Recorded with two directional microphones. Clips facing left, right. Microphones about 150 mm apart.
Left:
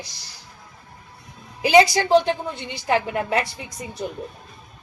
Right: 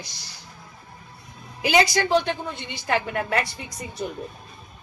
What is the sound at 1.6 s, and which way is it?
A woman's voice, 30° left (ahead or behind).